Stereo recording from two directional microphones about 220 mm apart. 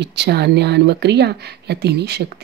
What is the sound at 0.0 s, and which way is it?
Speech, 50° right (ahead or behind).